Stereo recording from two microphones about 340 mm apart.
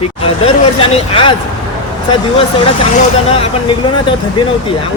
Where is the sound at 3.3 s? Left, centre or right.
Centre.